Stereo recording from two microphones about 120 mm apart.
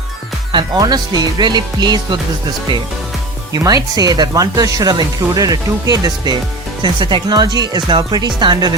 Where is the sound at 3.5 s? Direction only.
30° right (ahead or behind).